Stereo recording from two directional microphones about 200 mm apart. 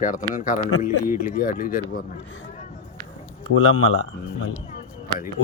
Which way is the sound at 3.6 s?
85° left.